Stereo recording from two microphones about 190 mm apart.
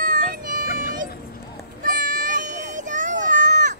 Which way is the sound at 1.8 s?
45° right (ahead or behind).